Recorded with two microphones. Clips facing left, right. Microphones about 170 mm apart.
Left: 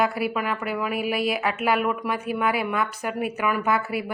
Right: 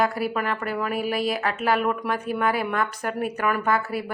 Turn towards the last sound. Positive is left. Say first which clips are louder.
# even
turn(degrees=10)  # may be behind; listen again after turning